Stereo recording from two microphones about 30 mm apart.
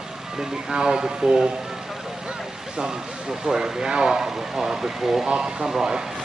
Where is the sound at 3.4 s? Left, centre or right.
Right.